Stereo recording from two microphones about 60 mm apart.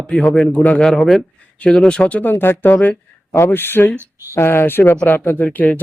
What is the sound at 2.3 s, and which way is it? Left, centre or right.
Speech, left.